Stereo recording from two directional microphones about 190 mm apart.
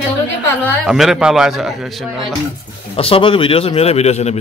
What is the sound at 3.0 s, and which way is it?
A man's voice, 30° left (ahead or behind).